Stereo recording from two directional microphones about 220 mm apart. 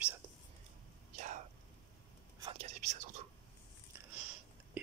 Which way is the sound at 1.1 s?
35° right (ahead or behind).